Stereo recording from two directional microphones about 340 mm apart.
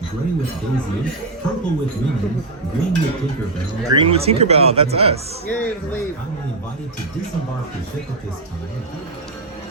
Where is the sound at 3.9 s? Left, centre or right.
Centre.